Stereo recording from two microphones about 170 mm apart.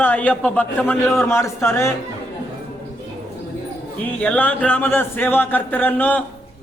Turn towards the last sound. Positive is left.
turn(degrees=10)  # may be behind; listen again after turning